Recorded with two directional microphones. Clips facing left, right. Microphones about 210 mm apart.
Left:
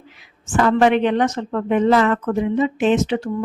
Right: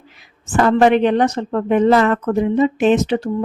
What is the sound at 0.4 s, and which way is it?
Speech, 35° right (ahead or behind).